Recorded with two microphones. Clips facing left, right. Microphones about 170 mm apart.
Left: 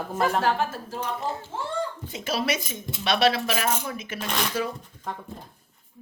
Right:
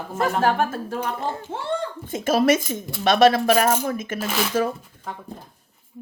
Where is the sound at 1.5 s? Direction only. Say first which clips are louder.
Right 2 dB; 75° right (ahead or behind).